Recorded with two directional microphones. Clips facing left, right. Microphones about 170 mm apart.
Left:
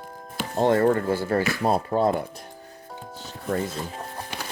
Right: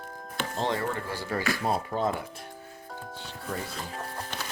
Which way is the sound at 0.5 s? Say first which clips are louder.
Left 11 dB; 50° left (ahead or behind).